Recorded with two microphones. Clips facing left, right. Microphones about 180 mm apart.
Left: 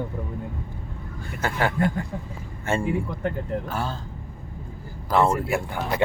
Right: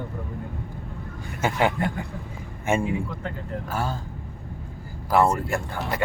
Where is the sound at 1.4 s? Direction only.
20° right (ahead or behind).